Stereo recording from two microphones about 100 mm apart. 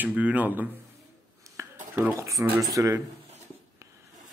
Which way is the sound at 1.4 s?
30° right (ahead or behind).